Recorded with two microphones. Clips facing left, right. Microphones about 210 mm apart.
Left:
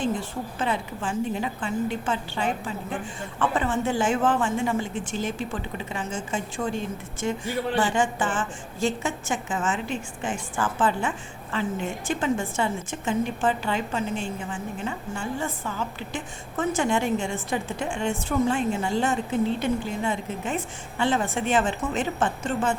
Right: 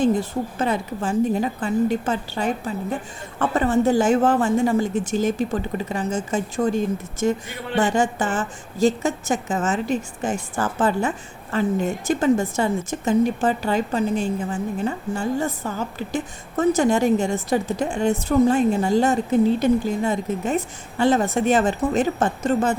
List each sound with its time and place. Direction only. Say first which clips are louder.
0.0 s a woman's voice: right 7 dB; 40° right (ahead or behind)